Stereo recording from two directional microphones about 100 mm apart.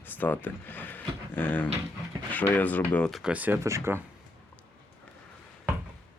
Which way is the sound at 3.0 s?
Centre (ahead or behind).